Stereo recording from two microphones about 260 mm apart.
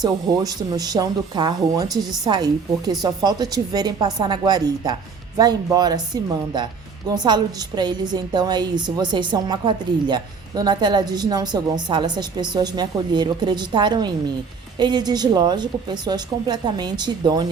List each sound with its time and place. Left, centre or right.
0.0 s a woman's voice: centre
7.1 s a woman's voice: centre